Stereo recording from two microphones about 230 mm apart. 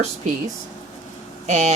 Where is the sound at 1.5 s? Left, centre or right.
Right.